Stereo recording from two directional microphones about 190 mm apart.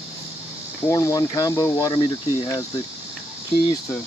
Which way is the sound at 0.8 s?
15° left (ahead or behind).